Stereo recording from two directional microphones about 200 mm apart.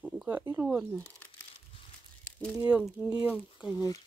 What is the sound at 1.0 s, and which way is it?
Crumpling, 5° left (ahead or behind).